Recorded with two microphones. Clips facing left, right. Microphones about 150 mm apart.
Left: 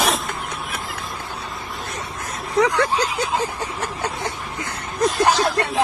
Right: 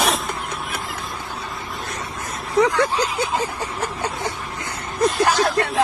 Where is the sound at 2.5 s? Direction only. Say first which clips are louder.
Right 1 dB; centre (ahead or behind).